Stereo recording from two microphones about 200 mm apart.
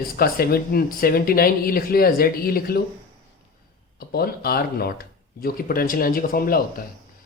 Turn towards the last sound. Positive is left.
turn(degrees=45)  # may be behind; listen again after turning